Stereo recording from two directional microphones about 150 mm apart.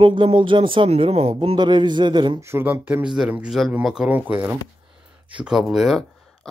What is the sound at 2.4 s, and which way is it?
Speech, 15° right (ahead or behind).